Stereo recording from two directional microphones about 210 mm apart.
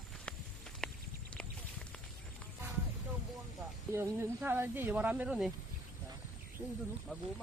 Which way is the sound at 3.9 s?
10° right (ahead or behind).